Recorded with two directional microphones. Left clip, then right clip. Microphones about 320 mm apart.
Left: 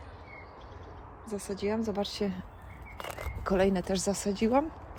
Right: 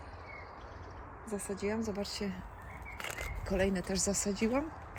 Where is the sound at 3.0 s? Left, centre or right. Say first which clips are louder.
Left 2 dB; centre.